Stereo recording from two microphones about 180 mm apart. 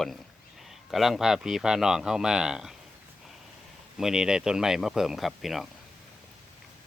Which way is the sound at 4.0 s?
5° right (ahead or behind).